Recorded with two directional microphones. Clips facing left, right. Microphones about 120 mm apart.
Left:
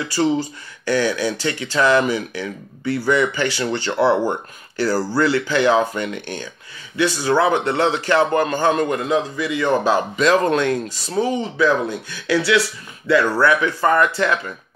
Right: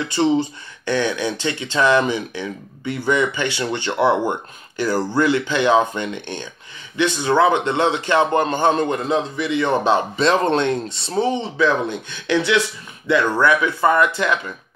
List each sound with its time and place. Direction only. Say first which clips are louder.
0.0 s a man's voice: right 1 dB; 20° right (ahead or behind)